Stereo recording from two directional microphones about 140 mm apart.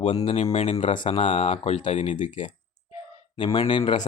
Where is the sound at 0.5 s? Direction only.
50° left (ahead or behind).